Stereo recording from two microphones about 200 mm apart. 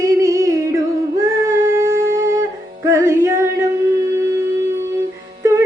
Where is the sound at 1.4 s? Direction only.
15° right (ahead or behind).